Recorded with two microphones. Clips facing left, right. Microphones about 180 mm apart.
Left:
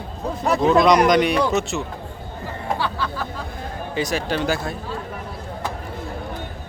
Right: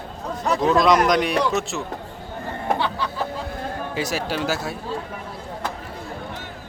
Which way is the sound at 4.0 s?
5° right (ahead or behind).